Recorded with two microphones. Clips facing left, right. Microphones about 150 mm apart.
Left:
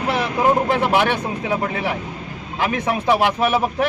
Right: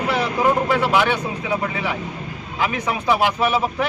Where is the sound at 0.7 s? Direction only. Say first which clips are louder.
Even; 55° left (ahead or behind).